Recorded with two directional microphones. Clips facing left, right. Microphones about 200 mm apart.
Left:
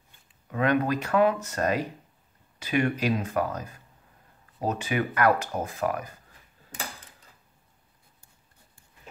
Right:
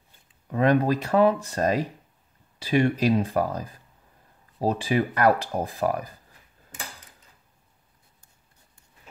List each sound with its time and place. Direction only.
0.5 s speech: 35° right (ahead or behind)